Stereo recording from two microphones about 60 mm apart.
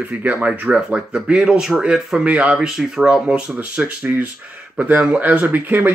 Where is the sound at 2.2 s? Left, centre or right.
Right.